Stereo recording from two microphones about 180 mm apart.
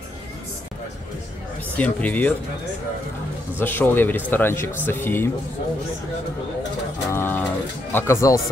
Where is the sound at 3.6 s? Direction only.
10° left (ahead or behind).